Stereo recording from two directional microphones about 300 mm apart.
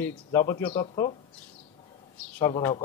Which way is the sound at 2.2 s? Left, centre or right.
Centre.